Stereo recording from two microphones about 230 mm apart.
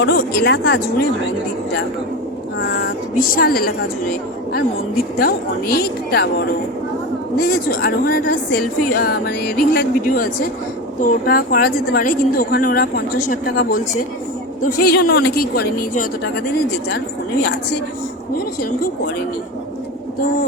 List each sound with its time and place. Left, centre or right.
0.0 s a woman's voice: left
2.6 s a sound: left
3.3 s a woman's voice: left
5.1 s a woman's voice: left
18.3 s a woman's voice: left